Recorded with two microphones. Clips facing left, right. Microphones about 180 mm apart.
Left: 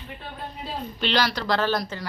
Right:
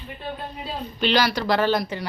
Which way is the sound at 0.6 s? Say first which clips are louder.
Right 3 dB; 5° right (ahead or behind).